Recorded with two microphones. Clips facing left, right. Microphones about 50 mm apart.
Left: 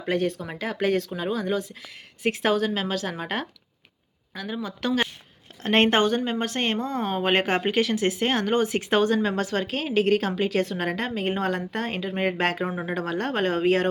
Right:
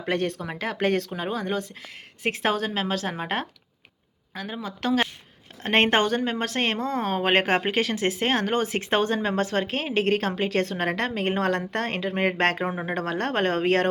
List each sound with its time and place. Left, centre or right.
0.1 s a woman's voice: right
7.2 s speech: right
12.7 s a woman's voice: right
13.0 s speech: right